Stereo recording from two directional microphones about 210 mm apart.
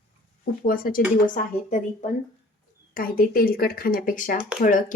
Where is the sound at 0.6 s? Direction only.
45° left (ahead or behind).